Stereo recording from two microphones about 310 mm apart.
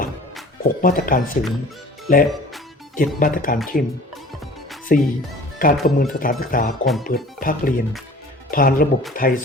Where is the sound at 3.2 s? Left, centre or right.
Left.